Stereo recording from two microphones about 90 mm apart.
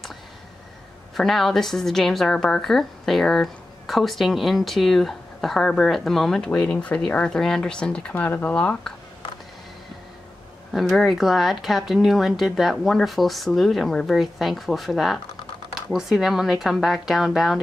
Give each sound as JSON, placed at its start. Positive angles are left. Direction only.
{"t": 1.1, "sound": "a woman's voice", "side_deg": 0}
{"t": 8.1, "sound": "speech", "side_deg": 20}
{"t": 10.7, "sound": "a woman's voice", "side_deg": 0}